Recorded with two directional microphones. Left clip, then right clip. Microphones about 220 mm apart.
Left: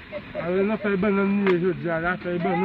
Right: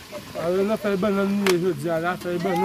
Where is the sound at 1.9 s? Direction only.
20° right (ahead or behind).